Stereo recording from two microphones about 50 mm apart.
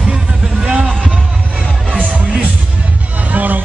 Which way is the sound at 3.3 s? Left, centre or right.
Right.